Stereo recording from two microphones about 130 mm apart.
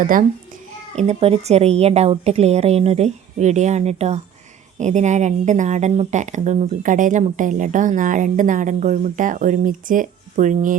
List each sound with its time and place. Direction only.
0.0 s a child's voice: 90° right
0.9 s a woman's voice: 55° right (ahead or behind); by 10.8 s 85° right